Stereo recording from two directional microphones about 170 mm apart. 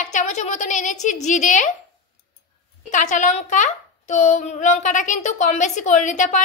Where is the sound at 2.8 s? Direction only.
45° left (ahead or behind).